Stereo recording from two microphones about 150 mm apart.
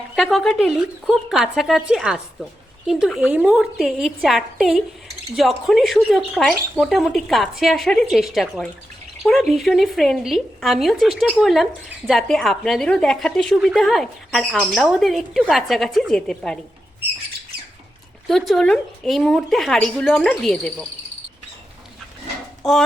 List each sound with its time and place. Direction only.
0.2 s a woman's voice: centre (ahead or behind)
18.3 s a woman's voice: centre (ahead or behind)
22.6 s a woman's voice: centre (ahead or behind)